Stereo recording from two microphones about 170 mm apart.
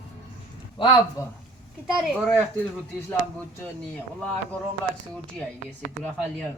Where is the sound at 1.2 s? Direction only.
20° left (ahead or behind).